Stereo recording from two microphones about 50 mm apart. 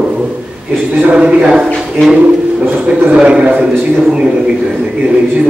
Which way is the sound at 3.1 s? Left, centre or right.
Right.